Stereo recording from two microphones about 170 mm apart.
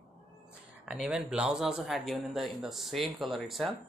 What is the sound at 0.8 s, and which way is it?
Speech, 5° right (ahead or behind).